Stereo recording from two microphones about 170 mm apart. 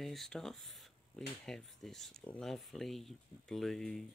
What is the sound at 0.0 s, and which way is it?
Speech, centre (ahead or behind).